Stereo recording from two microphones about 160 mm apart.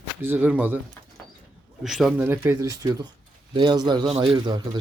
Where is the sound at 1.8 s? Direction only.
Centre (ahead or behind).